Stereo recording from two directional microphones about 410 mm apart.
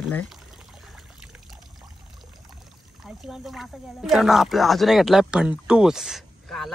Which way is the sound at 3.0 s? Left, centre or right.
Centre.